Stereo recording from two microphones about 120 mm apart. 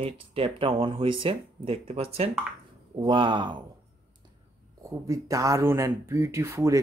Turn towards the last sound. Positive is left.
turn(degrees=-25)  # may be behind; listen again after turning